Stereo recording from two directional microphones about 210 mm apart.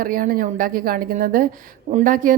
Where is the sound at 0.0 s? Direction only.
40° right (ahead or behind).